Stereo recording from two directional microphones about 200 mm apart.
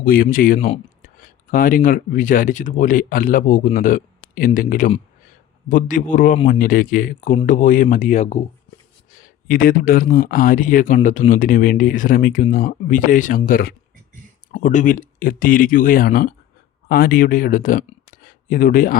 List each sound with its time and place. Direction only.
0.0 s speech: 45° left (ahead or behind)